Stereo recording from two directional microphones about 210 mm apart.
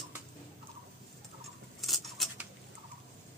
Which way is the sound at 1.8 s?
Centre (ahead or behind).